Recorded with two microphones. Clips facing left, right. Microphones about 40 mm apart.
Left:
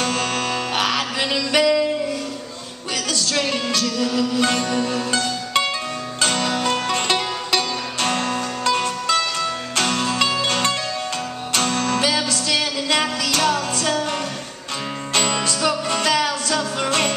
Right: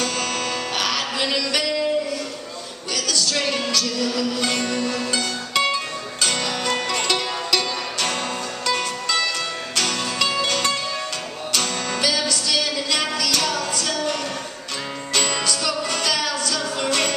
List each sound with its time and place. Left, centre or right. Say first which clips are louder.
0.0 s music: left 2 dB; left
3.1 s music: right 1 dB; left
3.3 s music: left 1 dB; centre
6.4 s music: left 3 dB; centre
6.9 s music: left 2 dB; left
12.0 s music: left 2 dB; left
15.6 s music: left 3 dB; left